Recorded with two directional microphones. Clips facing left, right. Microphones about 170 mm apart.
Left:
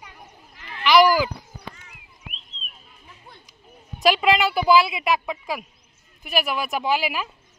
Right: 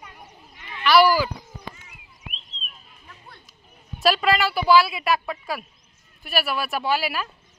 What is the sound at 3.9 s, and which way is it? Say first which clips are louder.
A woman's voice: left 2 dB; 15° left (ahead or behind).